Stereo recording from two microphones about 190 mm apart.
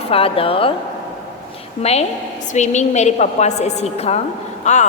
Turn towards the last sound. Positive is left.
turn(degrees=40)  # may be behind; listen again after turning